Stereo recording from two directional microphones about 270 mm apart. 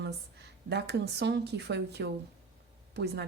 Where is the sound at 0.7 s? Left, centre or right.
Right.